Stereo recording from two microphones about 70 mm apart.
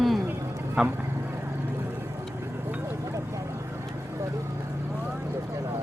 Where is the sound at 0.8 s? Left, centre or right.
Centre.